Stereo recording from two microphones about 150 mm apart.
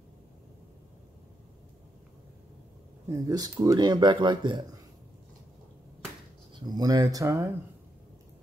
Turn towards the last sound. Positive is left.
turn(degrees=-20)  # may be behind; listen again after turning